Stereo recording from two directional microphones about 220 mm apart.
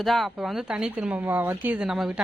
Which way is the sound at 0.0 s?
Centre (ahead or behind).